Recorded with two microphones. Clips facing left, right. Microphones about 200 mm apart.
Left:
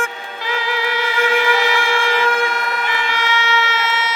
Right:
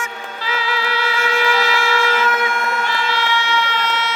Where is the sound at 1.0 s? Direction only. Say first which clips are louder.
Left 3 dB; 15° left (ahead or behind).